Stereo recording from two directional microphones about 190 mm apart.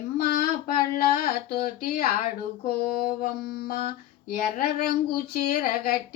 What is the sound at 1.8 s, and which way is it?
Speech, 50° left (ahead or behind).